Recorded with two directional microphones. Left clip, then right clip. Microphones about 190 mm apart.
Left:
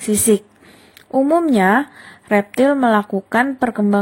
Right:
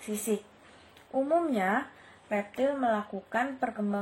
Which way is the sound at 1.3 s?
45° left (ahead or behind).